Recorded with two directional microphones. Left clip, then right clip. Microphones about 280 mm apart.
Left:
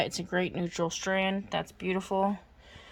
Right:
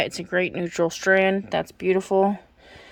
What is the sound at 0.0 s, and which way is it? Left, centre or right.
Speech, centre.